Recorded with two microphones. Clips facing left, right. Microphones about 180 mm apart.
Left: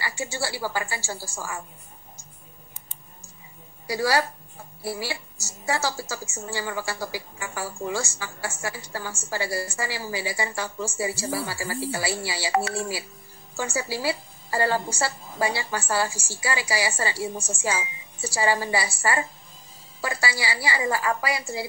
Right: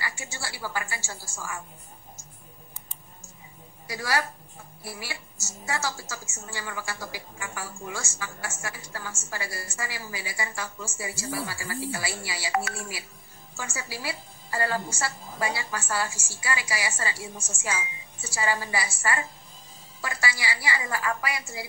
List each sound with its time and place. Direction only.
0.0 s a woman's voice: 30° left (ahead or behind)
3.8 s a woman's voice: 30° left (ahead or behind)